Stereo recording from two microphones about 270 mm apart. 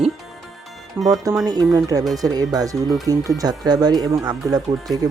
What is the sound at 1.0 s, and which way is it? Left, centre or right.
Speech, centre.